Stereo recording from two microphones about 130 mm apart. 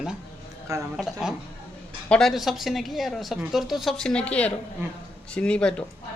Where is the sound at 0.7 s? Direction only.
25° right (ahead or behind).